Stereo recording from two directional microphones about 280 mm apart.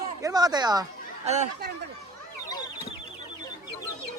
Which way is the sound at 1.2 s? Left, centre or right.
Right.